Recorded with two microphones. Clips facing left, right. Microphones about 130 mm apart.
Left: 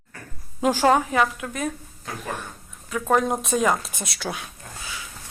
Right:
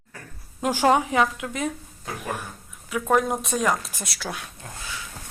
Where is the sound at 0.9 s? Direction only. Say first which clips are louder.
Even; 20° right (ahead or behind); by 4.5 s centre (ahead or behind).